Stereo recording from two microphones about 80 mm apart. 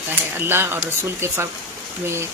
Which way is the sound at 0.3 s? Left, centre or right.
Right.